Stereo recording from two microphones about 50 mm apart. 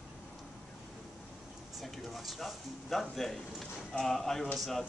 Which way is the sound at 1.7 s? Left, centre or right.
Centre.